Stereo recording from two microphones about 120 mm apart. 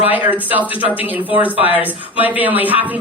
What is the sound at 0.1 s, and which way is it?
Speech, 15° right (ahead or behind).